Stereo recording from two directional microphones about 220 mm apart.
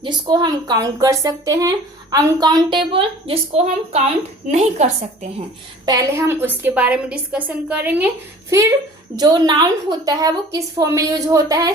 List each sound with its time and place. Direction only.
0.0 s a woman's voice: 20° right (ahead or behind)
5.8 s a woman's voice: 15° right (ahead or behind)